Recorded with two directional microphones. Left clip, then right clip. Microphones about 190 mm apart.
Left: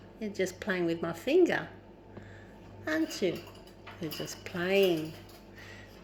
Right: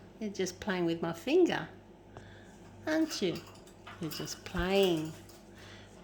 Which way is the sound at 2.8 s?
30° right (ahead or behind).